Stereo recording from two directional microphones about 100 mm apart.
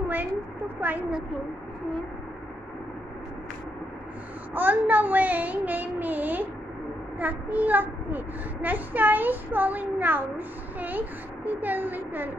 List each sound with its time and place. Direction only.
0.7 s a child's voice: 15° right (ahead or behind)
4.6 s a child's voice: 20° right (ahead or behind)